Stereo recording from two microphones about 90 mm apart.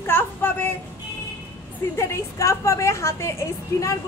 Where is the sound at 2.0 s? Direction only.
35° left (ahead or behind).